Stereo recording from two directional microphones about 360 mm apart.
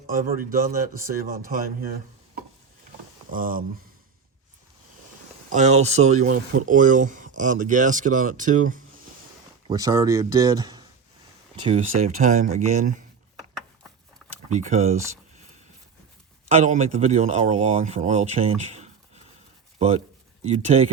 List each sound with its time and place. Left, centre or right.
0.7 s speech: right
3.2 s speech: right
5.5 s speech: centre
9.6 s speech: centre
14.6 s speech: centre
16.5 s speech: centre
20.4 s speech: centre